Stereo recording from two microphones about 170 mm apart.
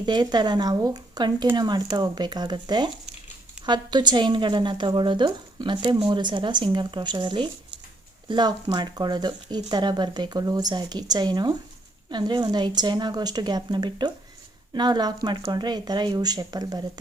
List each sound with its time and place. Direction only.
0.0 s a woman's voice: 25° right (ahead or behind)